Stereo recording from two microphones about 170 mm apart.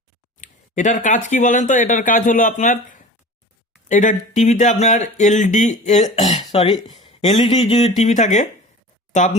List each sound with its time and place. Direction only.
0.3 s speech: 45° left (ahead or behind)
6.5 s speech: 30° left (ahead or behind)